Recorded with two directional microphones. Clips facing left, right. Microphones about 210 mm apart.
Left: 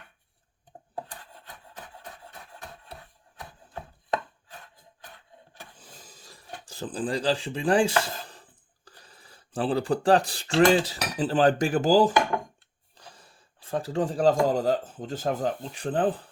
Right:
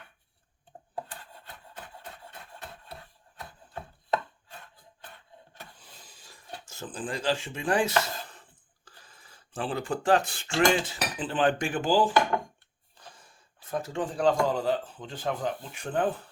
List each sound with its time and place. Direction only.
1.5 s rub: 15° left (ahead or behind)
5.0 s wood: 15° left (ahead or behind)
6.1 s a sound: 40° left (ahead or behind)
6.7 s speech: 35° left (ahead or behind)
13.1 s speech: 30° left (ahead or behind)